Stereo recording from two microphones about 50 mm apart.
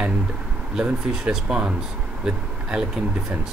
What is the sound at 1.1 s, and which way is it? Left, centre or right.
Speech, centre.